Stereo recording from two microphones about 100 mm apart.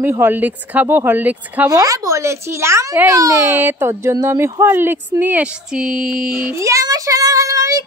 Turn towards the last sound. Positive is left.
turn(degrees=-35)  # may be behind; listen again after turning